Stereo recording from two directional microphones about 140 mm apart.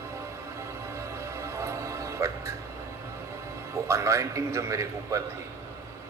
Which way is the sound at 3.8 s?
20° right (ahead or behind).